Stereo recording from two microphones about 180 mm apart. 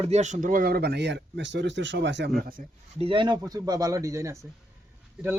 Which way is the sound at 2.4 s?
50° right (ahead or behind).